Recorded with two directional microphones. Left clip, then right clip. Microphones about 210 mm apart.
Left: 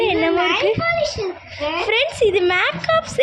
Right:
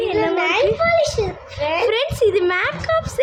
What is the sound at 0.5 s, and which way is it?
Speech, 30° right (ahead or behind).